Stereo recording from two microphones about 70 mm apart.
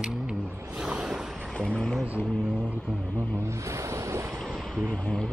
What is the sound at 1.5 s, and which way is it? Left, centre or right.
Speech, centre.